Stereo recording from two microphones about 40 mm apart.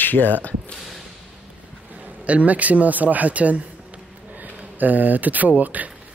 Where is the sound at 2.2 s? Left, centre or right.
Right.